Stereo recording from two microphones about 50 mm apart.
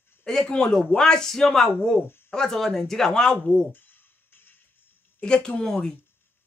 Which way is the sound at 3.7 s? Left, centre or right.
Left.